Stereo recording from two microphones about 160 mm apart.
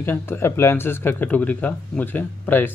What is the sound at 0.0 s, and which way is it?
Speech, 15° left (ahead or behind).